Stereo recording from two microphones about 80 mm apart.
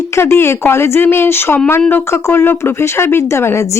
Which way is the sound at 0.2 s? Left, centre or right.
Left.